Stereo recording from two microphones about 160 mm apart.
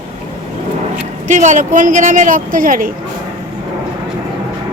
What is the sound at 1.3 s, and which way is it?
A woman's voice, 50° right (ahead or behind).